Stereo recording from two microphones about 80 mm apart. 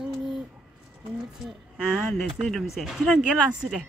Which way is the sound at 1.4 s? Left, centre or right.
Centre.